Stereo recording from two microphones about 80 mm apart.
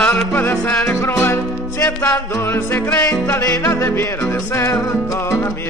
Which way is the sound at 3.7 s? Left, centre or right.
Left.